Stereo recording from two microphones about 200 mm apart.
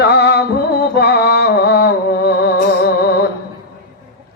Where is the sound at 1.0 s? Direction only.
55° left (ahead or behind).